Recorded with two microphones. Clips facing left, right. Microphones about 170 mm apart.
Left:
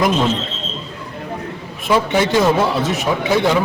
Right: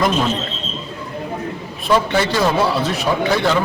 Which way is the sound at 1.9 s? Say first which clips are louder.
Left 1 dB; 15° left (ahead or behind).